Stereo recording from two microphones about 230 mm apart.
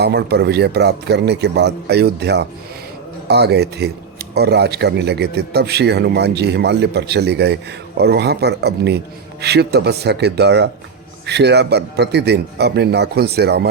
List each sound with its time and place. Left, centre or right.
0.0 s speech: right